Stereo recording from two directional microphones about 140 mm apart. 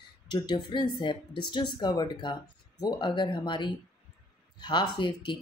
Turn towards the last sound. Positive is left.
turn(degrees=35)  # may be behind; listen again after turning